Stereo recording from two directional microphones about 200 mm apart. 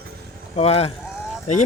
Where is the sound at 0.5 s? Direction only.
30° left (ahead or behind).